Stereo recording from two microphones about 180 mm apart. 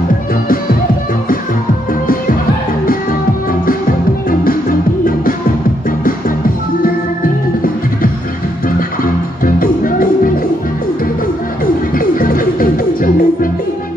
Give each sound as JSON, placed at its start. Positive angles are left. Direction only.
{"t": 4.3, "sound": "music", "side_deg": 50}
{"t": 8.6, "sound": "music", "side_deg": 50}
{"t": 11.6, "sound": "music", "side_deg": 50}